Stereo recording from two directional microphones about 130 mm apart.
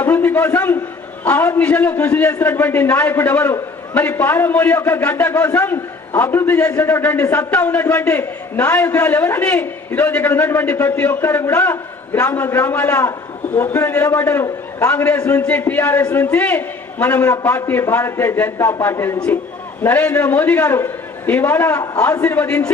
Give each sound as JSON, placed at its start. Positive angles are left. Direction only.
{"t": 0.0, "sound": "a man's voice", "side_deg": 15}